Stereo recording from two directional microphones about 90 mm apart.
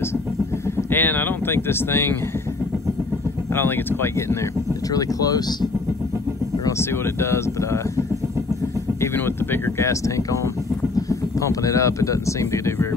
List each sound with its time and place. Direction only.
0.7 s a sound: 25° left (ahead or behind)
3.5 s speech: 25° left (ahead or behind)
4.9 s speech: 45° left (ahead or behind)
6.8 s speech: 30° left (ahead or behind)
9.0 s speech: 25° left (ahead or behind)